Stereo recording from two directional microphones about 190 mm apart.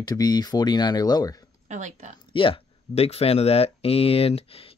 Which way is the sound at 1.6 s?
40° right (ahead or behind).